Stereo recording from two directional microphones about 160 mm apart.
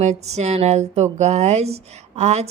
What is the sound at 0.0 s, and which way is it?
Speech, 45° right (ahead or behind).